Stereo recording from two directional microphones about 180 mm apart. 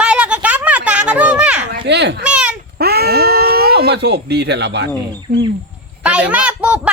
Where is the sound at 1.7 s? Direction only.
70° right (ahead or behind).